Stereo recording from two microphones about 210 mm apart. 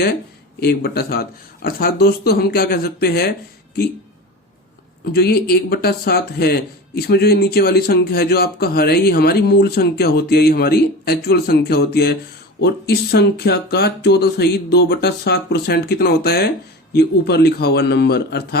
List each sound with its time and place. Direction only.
0.6 s speech: 50° left (ahead or behind)
5.1 s speech: 45° left (ahead or behind)